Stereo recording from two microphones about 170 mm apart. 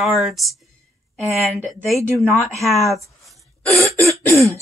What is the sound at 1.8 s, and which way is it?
Speech, centre (ahead or behind).